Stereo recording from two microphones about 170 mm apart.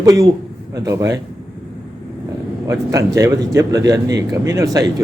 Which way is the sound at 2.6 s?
20° right (ahead or behind).